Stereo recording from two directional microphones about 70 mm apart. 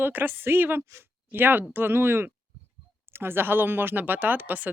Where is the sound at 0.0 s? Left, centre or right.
Right.